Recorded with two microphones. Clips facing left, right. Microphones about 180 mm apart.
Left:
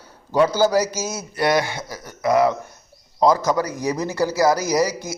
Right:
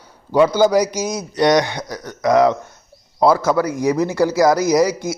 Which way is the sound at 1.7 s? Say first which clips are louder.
Right 4 dB; 5° left (ahead or behind).